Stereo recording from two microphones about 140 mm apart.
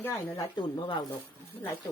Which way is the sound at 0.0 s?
15° left (ahead or behind).